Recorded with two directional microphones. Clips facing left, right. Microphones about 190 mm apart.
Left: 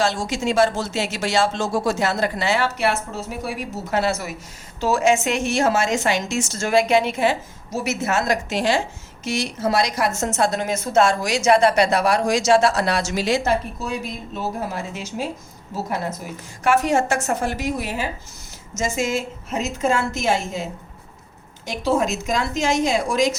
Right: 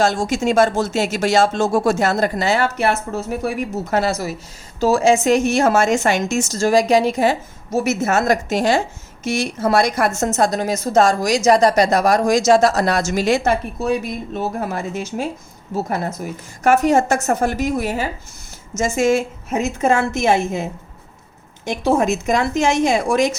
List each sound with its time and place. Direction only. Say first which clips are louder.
0.0 s a woman's voice: right 4 dB; 45° right (ahead or behind)
3.9 s a woman's voice: right 2 dB; 40° right (ahead or behind)
16.6 s a woman's voice: right 4 dB; 45° right (ahead or behind)
21.8 s a woman's voice: right 4 dB; 55° right (ahead or behind)